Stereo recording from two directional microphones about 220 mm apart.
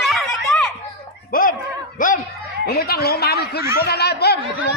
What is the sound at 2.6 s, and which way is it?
Speech, 45° left (ahead or behind).